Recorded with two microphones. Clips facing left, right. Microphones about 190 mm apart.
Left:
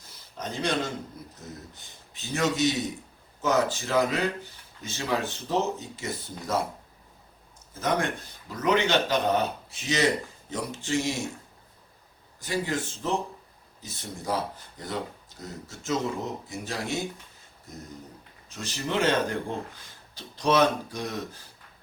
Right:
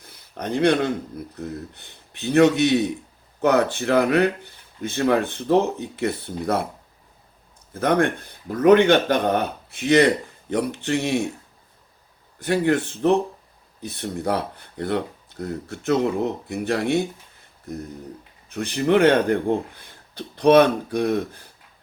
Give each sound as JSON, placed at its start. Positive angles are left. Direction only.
{"t": 0.0, "sound": "a sound", "side_deg": -60}
{"t": 1.4, "sound": "speech", "side_deg": -60}
{"t": 7.7, "sound": "speech", "side_deg": -60}
{"t": 12.4, "sound": "speech", "side_deg": -60}
{"t": 18.4, "sound": "speech", "side_deg": -60}